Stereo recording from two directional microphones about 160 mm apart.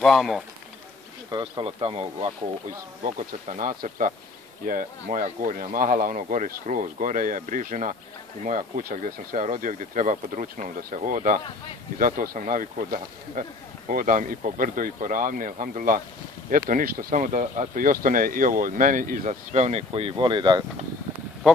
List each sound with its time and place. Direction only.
0.0 s speech: centre (ahead or behind)
1.3 s speech: 30° right (ahead or behind)